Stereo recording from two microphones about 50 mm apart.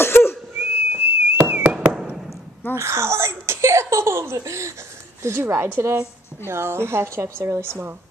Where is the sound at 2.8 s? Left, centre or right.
Right.